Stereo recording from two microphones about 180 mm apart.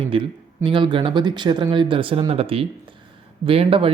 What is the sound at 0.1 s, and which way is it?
Speech, 25° right (ahead or behind).